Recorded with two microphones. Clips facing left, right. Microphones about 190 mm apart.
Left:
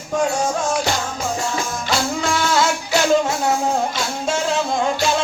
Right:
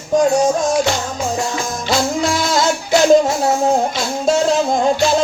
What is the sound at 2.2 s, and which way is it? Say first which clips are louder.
Music: right 2 dB; 35° right (ahead or behind).